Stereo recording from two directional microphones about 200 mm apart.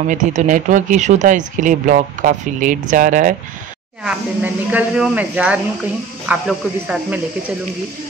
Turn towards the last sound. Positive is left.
turn(degrees=-5)  # may be behind; listen again after turning